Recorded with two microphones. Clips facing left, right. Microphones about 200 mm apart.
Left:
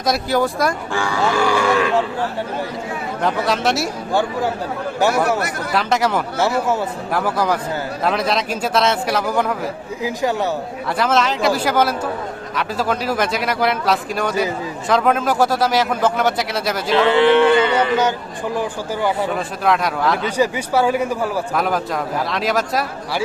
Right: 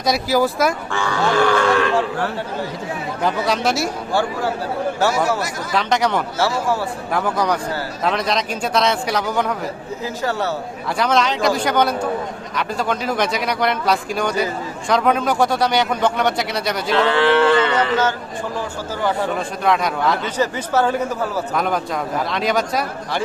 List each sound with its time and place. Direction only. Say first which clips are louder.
0.0 s a man's voice: right 1 dB; centre (ahead or behind)
1.1 s a man's voice: right 2 dB; 10° left (ahead or behind)
3.2 s a man's voice: left 1 dB; centre (ahead or behind)
4.1 s a man's voice: left 2 dB; 15° left (ahead or behind)
5.7 s a man's voice: even; 5° left (ahead or behind)
10.0 s a man's voice: left 3 dB; 15° left (ahead or behind)
10.9 s a man's voice: even; centre (ahead or behind)
17.1 s a man's voice: left 3 dB; 20° left (ahead or behind)
19.0 s a man's voice: even; centre (ahead or behind)